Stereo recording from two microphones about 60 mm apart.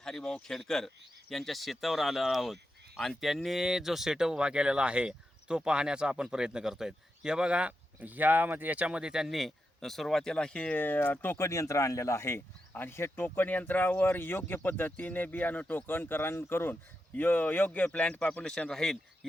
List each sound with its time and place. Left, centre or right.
0.0 s speech: centre; by 11.3 s left
11.3 s speech: left
12.9 s speech: left
17.8 s speech: centre